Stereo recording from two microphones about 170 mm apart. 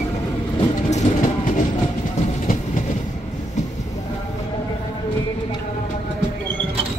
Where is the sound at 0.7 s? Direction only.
45° left (ahead or behind).